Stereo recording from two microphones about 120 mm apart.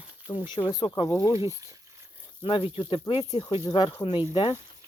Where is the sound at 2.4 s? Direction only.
45° left (ahead or behind).